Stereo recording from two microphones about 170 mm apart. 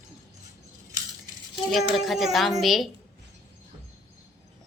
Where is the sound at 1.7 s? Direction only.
Centre (ahead or behind).